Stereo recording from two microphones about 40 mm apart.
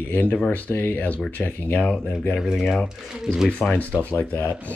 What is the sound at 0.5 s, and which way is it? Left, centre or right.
Speech, left.